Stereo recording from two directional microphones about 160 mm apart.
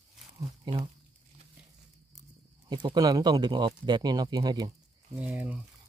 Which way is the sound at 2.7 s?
30° right (ahead or behind).